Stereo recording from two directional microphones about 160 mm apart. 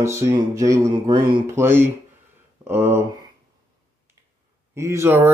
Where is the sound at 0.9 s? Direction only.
30° right (ahead or behind).